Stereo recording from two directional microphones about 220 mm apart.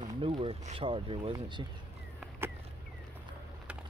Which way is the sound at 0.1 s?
25° right (ahead or behind).